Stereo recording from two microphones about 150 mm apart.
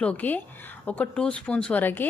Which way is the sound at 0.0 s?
10° left (ahead or behind).